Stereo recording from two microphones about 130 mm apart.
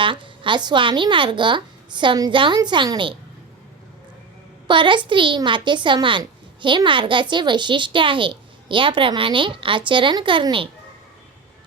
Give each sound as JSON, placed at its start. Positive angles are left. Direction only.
{"t": 0.0, "sound": "speech", "side_deg": -40}
{"t": 4.7, "sound": "speech", "side_deg": -40}